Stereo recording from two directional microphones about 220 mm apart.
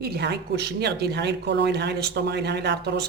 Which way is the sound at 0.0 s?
45° right (ahead or behind).